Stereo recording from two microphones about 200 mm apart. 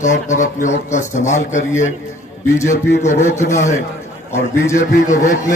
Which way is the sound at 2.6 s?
35° left (ahead or behind).